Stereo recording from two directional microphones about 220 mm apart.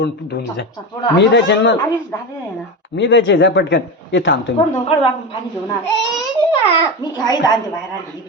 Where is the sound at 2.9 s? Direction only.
55° left (ahead or behind).